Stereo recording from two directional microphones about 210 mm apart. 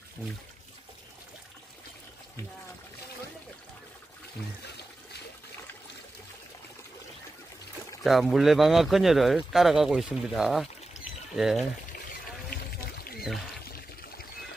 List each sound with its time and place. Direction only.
8.0 s speech: centre (ahead or behind)
12.4 s trickle: 45° left (ahead or behind)